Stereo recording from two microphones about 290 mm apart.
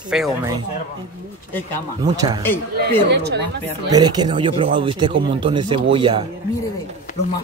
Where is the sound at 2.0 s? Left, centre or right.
Centre.